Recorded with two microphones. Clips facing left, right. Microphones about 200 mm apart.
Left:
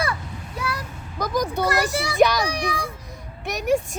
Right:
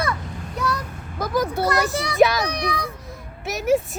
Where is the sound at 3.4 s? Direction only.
5° right (ahead or behind).